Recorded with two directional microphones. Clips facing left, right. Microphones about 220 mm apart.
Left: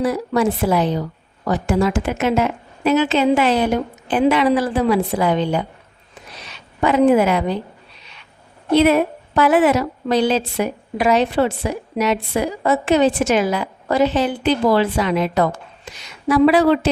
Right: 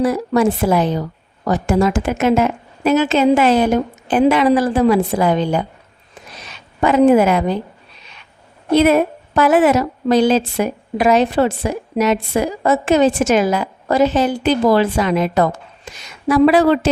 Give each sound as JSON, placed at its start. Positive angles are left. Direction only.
{"t": 0.0, "sound": "a woman's voice", "side_deg": -45}
{"t": 6.8, "sound": "a woman's voice", "side_deg": -45}
{"t": 8.7, "sound": "a woman's voice", "side_deg": -45}